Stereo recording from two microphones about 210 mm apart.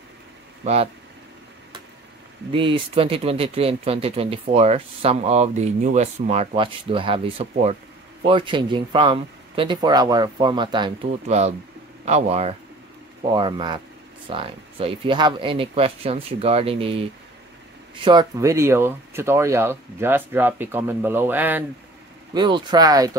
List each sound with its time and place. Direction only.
2.5 s speech: 25° right (ahead or behind); by 21.6 s 10° right (ahead or behind)
22.3 s speech: 20° right (ahead or behind)